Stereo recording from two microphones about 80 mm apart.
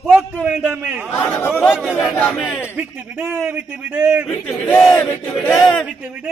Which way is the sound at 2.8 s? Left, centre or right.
Centre.